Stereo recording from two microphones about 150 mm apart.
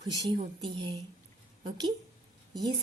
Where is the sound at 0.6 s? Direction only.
30° right (ahead or behind).